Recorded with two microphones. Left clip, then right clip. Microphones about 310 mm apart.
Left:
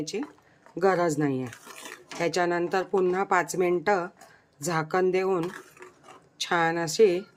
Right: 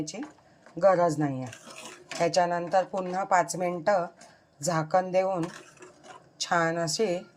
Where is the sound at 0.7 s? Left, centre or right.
Centre.